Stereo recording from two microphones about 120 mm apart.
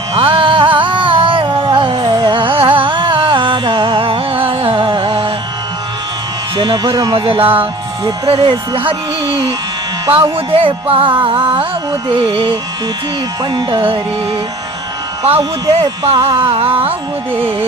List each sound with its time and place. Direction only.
0.2 s music: 45° right (ahead or behind)
6.6 s speech: 40° right (ahead or behind)
8.3 s music: 45° right (ahead or behind)
13.4 s speech: 40° right (ahead or behind)
15.2 s speech: 55° right (ahead or behind)
16.0 s music: 50° right (ahead or behind)